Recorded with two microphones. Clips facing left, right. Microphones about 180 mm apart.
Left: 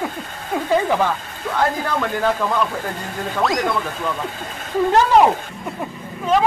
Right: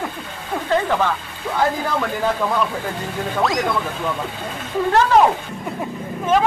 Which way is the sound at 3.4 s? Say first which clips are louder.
Left 1 dB; centre (ahead or behind).